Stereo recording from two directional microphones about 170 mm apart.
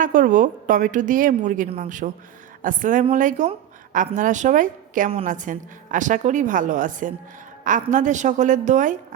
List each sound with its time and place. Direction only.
0.0 s a woman's voice: 50° right (ahead or behind)